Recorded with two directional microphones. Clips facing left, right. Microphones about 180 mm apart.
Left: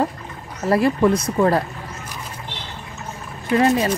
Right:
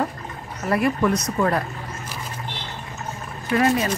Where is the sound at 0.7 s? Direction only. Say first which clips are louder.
Left 4 dB; 30° left (ahead or behind).